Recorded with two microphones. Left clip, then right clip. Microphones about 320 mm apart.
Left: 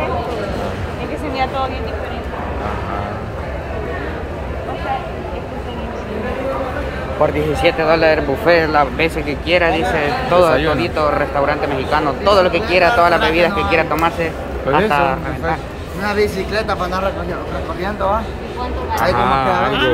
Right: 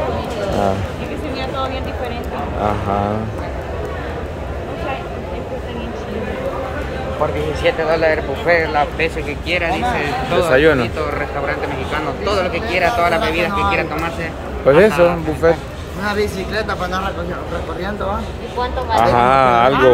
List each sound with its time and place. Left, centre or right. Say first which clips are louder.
7.6 s speech: left 2 dB; left
9.5 s a man's voice: left 3 dB; centre
10.5 s speech: right 3 dB; centre
10.8 s a man's voice: left 4 dB; centre
15.4 s speech: right 7 dB; centre
16.0 s a man's voice: left 2 dB; centre
19.1 s speech: right 4 dB; centre